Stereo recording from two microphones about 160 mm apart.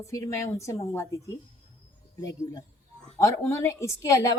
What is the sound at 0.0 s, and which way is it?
A woman's voice, 20° left (ahead or behind).